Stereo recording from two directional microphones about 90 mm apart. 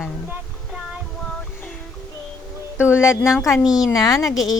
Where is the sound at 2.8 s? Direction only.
30° left (ahead or behind).